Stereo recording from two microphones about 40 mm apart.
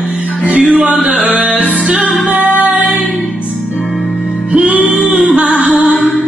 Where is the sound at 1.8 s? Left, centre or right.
Right.